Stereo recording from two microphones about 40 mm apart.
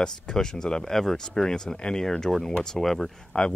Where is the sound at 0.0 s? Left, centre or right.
Centre.